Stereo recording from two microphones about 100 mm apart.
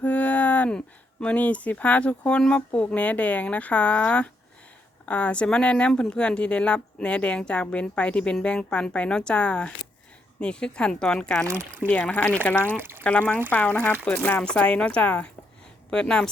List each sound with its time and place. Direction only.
0.0 s speech: 15° left (ahead or behind)
11.4 s speech: 20° right (ahead or behind)
11.9 s speech: 15° left (ahead or behind)